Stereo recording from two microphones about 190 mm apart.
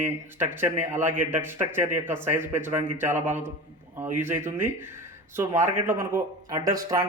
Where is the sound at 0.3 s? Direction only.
10° right (ahead or behind).